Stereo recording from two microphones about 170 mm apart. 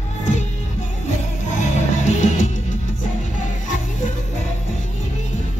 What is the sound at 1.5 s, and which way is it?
Music, 45° left (ahead or behind).